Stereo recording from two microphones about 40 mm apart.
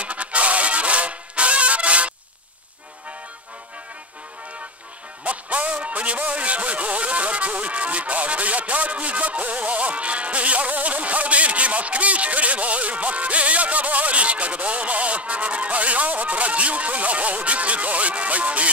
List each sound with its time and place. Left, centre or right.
0.0 s music: right
5.2 s music: right
5.9 s speech: right